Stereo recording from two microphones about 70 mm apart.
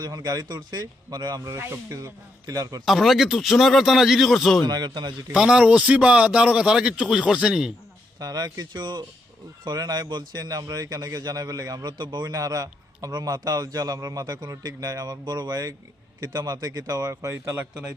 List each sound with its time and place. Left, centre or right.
0.0 s a man's voice: right
1.5 s a man's voice: right
1.9 s speech: right
2.8 s speech: centre
4.6 s speech: right
5.3 s a man's voice: centre
8.2 s a man's voice: right
9.6 s speech: right
17.2 s a man's voice: right